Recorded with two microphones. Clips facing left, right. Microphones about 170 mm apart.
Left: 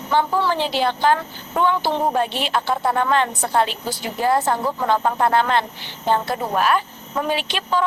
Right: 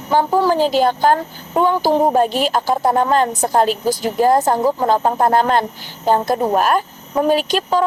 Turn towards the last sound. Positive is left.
turn(degrees=-40)  # may be behind; listen again after turning